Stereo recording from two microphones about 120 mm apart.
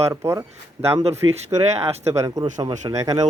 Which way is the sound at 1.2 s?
35° right (ahead or behind).